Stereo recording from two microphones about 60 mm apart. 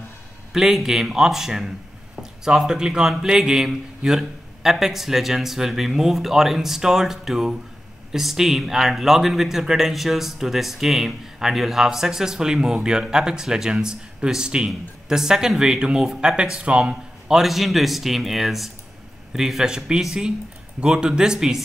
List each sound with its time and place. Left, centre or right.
0.5 s a man's voice: centre
17.3 s a man's voice: centre